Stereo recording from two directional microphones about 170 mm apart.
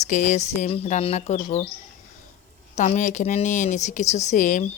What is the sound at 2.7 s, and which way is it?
Speech, 45° left (ahead or behind).